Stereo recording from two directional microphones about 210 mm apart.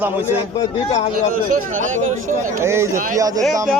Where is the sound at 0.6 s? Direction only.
25° left (ahead or behind).